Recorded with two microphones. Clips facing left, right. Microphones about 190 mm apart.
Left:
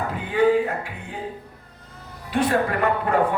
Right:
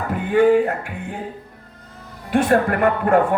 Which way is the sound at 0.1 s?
50° right (ahead or behind).